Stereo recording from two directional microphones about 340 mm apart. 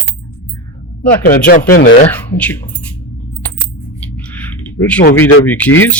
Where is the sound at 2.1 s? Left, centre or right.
Centre.